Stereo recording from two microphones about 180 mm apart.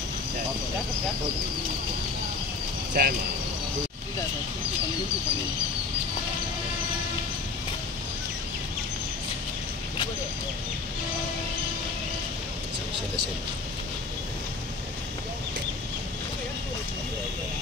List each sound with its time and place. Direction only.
2.9 s speech: 50° right (ahead or behind)